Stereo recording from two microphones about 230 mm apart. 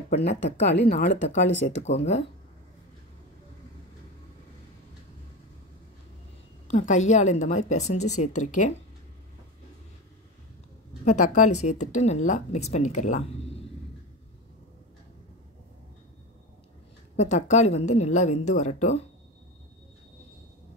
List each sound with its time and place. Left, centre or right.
0.3 s a woman's voice: left
6.7 s a woman's voice: left
11.1 s a woman's voice: left
17.2 s a woman's voice: left